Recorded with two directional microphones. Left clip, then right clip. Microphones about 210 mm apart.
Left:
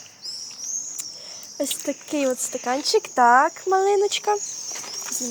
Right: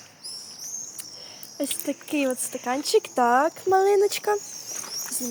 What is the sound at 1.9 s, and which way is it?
Speech, 15° left (ahead or behind).